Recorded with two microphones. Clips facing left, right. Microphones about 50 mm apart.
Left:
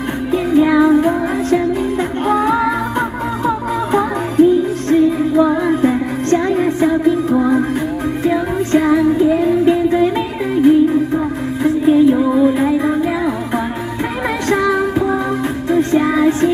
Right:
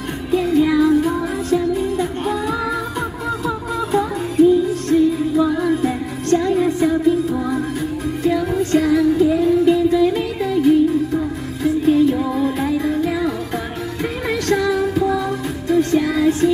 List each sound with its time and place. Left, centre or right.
0.3 s music: left
11.8 s music: left
14.2 s music: left